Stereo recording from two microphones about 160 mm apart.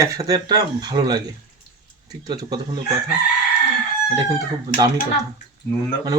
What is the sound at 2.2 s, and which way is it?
Speech, 25° right (ahead or behind).